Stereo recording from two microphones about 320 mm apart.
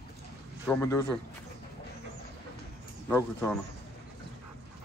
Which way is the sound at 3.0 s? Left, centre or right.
Centre.